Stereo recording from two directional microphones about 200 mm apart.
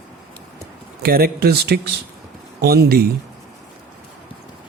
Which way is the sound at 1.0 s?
50° right (ahead or behind).